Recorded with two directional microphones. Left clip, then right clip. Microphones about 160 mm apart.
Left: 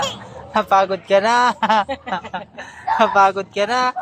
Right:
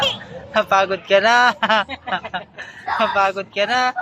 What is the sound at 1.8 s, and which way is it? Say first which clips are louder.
Speech: left 4 dB; 40° left (ahead or behind).